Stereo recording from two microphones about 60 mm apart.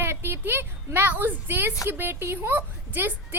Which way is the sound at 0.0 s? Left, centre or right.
Right.